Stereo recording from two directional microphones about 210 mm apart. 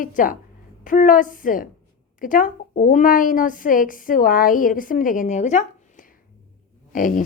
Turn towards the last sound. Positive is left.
turn(degrees=40)  # may be behind; listen again after turning